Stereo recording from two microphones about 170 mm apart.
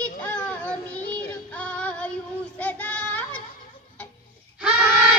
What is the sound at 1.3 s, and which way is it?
Music, 5° left (ahead or behind).